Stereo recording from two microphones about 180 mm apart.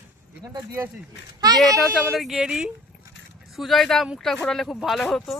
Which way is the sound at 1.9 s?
Centre (ahead or behind).